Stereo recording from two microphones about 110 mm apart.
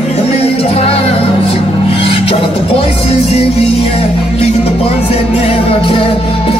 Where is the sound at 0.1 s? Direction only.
65° left (ahead or behind).